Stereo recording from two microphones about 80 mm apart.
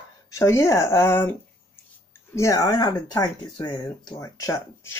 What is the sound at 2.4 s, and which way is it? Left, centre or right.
Speech, left.